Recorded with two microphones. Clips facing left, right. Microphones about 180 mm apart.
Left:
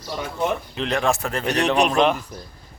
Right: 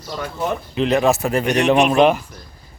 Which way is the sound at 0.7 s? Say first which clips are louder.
Right 6 dB; 5° right (ahead or behind).